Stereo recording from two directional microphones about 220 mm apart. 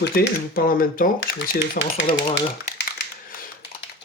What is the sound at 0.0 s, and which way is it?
Speech, 40° left (ahead or behind).